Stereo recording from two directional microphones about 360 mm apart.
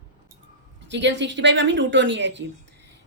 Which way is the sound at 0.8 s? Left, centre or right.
Right.